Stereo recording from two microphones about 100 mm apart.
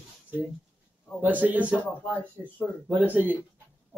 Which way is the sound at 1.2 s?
15° right (ahead or behind).